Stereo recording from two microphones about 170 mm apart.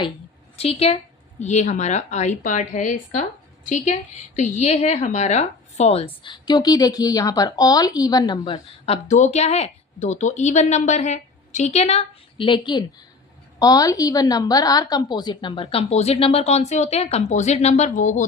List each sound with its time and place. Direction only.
0.5 s a woman's voice: 35° left (ahead or behind)
6.2 s a woman's voice: 25° left (ahead or behind)
9.0 s a woman's voice: 45° left (ahead or behind)